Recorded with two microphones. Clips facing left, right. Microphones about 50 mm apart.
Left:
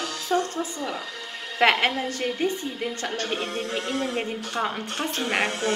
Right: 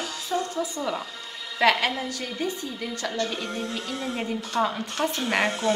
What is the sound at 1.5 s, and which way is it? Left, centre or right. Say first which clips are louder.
A woman's voice: left 1 dB; left.